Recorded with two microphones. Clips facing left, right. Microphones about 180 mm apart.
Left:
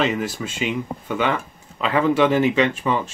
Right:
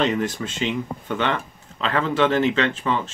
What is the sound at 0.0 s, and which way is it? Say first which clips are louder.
Speech: even; 5° left (ahead or behind).